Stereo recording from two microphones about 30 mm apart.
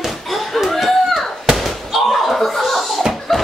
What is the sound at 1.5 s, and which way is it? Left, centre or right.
Slam, centre.